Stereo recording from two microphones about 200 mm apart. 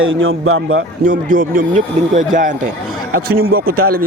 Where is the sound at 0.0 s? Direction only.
80° right.